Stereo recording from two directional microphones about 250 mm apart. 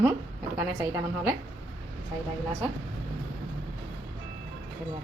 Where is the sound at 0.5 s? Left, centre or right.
Centre.